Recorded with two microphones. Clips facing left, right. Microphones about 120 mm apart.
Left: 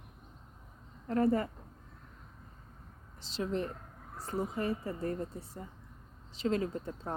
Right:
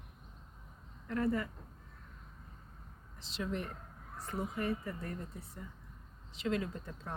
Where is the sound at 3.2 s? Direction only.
30° left (ahead or behind).